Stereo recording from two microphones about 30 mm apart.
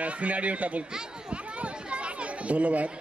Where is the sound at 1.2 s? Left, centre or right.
Right.